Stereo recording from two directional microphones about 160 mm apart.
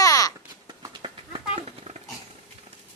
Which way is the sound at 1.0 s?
35° right (ahead or behind).